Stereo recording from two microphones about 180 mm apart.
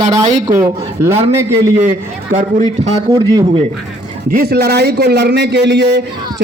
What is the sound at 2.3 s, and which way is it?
Speech, 40° right (ahead or behind).